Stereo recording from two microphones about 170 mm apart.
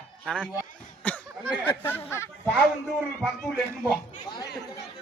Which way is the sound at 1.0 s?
10° left (ahead or behind).